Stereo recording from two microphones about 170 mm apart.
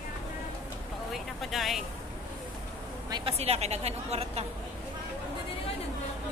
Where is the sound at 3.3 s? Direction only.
40° right (ahead or behind).